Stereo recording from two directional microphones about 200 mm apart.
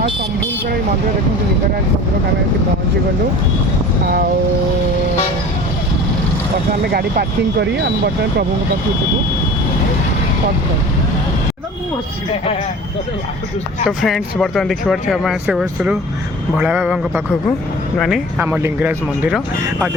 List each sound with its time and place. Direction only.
4.0 s speech: 50° right (ahead or behind)
6.8 s speech: 50° right (ahead or behind)
13.8 s speech: centre (ahead or behind)